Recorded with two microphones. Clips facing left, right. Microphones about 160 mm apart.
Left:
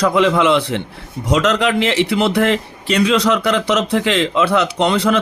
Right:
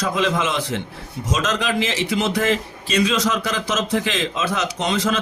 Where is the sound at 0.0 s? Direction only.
65° left (ahead or behind).